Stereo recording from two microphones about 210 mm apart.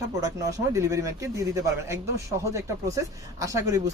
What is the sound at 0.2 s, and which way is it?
Speech, 15° right (ahead or behind).